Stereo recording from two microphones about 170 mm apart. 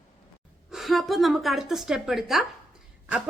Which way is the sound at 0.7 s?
Centre (ahead or behind).